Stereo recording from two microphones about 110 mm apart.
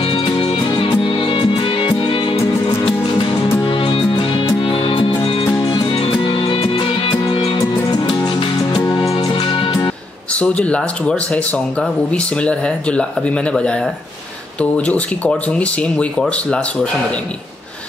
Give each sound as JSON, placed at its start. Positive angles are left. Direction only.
{"t": 0.0, "sound": "music", "side_deg": 60}
{"t": 0.7, "sound": "music", "side_deg": 50}
{"t": 8.7, "sound": "music", "side_deg": 35}
{"t": 9.1, "sound": "music", "side_deg": 55}
{"t": 10.3, "sound": "speech", "side_deg": 10}